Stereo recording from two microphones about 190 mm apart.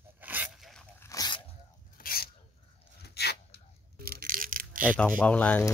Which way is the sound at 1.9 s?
50° left (ahead or behind).